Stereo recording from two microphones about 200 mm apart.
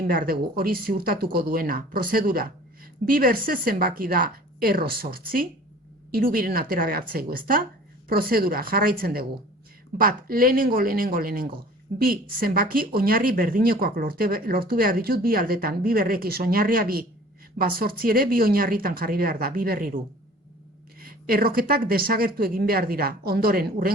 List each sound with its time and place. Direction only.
0.0 s speech: 45° right (ahead or behind)
21.0 s speech: 45° right (ahead or behind)